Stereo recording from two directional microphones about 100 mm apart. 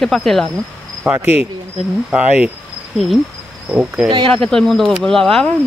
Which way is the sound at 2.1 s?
10° right (ahead or behind).